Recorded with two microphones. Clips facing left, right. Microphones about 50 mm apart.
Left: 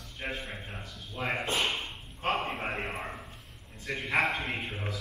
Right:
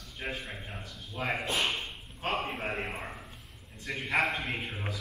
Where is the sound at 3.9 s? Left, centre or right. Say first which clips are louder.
Left 1 dB; centre.